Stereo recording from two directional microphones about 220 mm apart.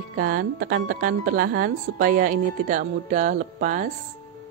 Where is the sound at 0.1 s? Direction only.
40° right (ahead or behind).